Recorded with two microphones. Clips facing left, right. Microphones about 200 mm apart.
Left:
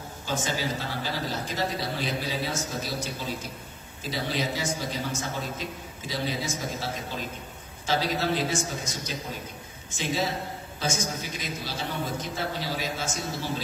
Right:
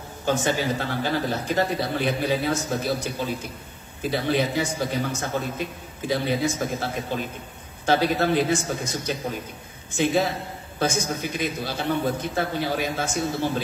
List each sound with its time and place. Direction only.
0.2 s a man's voice: 60° right (ahead or behind)